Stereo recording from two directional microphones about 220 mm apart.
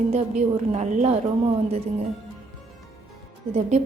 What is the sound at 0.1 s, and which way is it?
A woman's voice, 30° right (ahead or behind).